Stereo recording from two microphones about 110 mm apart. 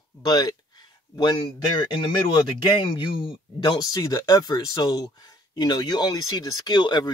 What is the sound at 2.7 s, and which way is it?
Speech, 50° left (ahead or behind).